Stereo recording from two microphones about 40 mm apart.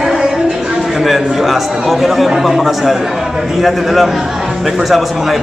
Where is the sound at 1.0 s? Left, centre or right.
Centre.